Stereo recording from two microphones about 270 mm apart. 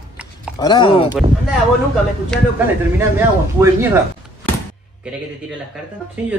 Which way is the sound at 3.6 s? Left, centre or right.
Centre.